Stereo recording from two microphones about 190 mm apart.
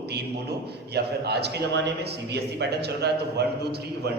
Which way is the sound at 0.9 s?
60° right (ahead or behind).